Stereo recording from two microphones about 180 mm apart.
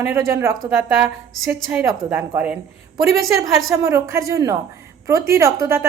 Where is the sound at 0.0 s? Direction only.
15° right (ahead or behind).